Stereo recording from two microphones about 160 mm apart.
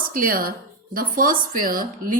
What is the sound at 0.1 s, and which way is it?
Speech, 65° right (ahead or behind).